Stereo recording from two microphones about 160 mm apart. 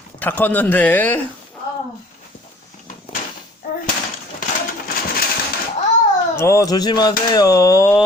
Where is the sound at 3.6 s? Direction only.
65° left (ahead or behind).